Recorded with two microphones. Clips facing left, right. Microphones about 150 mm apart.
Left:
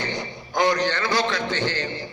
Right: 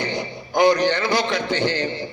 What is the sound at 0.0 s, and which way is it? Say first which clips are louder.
A man's voice: right 3 dB; 15° right (ahead or behind).